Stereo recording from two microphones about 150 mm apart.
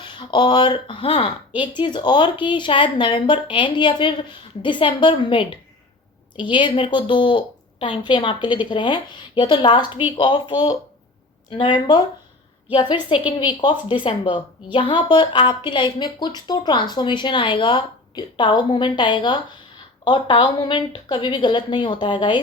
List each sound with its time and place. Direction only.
0.0 s speech: 30° left (ahead or behind)